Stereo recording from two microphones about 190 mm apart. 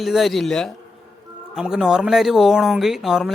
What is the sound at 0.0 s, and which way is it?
Speech, centre (ahead or behind).